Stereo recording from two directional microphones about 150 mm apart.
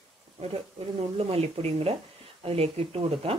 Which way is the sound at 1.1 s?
45° right (ahead or behind).